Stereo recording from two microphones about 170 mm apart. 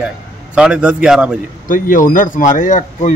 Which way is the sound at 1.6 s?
50° left (ahead or behind).